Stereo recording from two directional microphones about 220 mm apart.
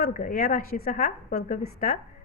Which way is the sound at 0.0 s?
40° left (ahead or behind).